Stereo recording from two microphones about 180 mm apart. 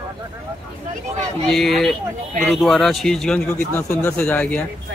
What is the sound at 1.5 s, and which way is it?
Speech, centre (ahead or behind).